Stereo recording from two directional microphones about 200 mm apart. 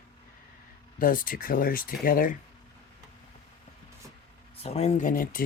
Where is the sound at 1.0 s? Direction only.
45° left (ahead or behind).